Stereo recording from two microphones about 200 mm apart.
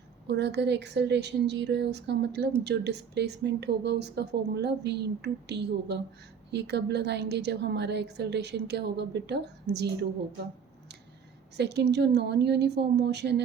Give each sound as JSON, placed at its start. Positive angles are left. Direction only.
{"t": 0.3, "sound": "a woman's voice", "side_deg": -60}
{"t": 11.5, "sound": "a woman's voice", "side_deg": -55}